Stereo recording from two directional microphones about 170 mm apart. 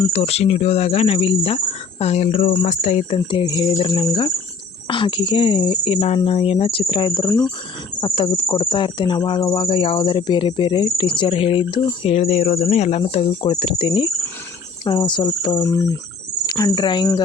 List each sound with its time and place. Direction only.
0.1 s speech: 35° left (ahead or behind)
2.5 s speech: 35° left (ahead or behind)
3.2 s cricket: 25° left (ahead or behind)
4.9 s speech: 30° left (ahead or behind)
8.0 s cricket: 30° left (ahead or behind)
9.6 s speech: 35° left (ahead or behind)
14.8 s cricket: 30° left (ahead or behind)